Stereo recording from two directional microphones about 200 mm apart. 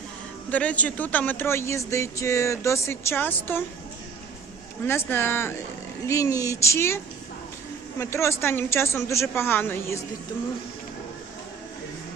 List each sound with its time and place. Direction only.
0.5 s speech: 5° left (ahead or behind)
4.9 s speech: 10° left (ahead or behind)